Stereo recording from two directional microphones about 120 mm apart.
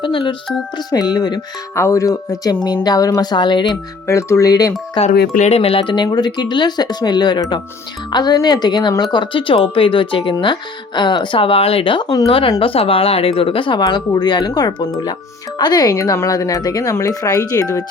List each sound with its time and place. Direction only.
0.0 s speech: 45° left (ahead or behind)
1.7 s speech: 25° left (ahead or behind); by 3.8 s 40° left (ahead or behind)
4.0 s speech: 25° left (ahead or behind)
4.9 s speech: 65° left (ahead or behind); by 17.8 s 30° left (ahead or behind)